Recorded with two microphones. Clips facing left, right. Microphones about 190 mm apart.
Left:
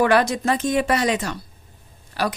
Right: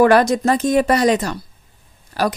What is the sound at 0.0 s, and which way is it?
A woman's voice, 40° right (ahead or behind).